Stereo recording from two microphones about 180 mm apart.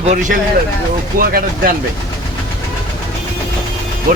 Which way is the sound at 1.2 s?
55° right (ahead or behind).